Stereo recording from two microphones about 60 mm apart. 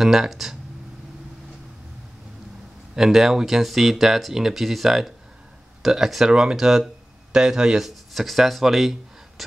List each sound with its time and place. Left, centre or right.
0.0 s speech: centre
3.0 s speech: centre
9.4 s a sound: centre